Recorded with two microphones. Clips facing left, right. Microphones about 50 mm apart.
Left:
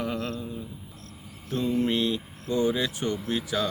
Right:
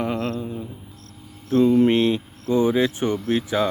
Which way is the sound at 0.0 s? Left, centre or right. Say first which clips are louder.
Right 6 dB; right.